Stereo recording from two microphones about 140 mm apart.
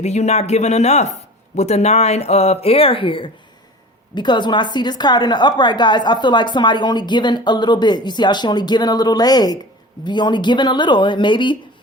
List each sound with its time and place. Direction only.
0.0 s a woman's voice: 55° left (ahead or behind); by 11.5 s 35° left (ahead or behind)